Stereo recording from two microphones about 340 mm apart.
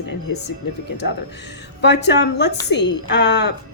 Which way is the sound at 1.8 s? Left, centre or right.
Left.